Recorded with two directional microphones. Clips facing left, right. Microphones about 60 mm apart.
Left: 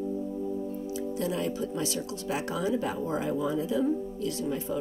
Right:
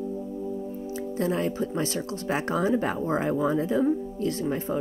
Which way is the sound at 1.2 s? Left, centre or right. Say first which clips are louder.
Right 5 dB; right.